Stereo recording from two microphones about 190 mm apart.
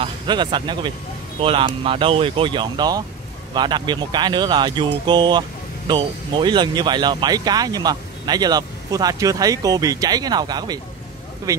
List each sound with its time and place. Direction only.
0.0 s speech: 25° right (ahead or behind)